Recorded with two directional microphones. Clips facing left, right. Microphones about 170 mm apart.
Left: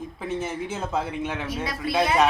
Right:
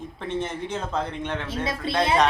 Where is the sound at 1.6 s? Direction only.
25° right (ahead or behind).